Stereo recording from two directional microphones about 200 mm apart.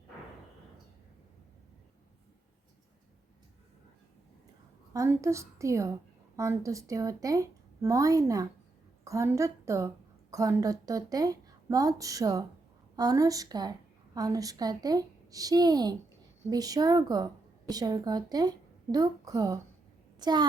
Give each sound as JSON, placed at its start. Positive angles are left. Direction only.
{"t": 4.9, "sound": "a woman's voice", "side_deg": -15}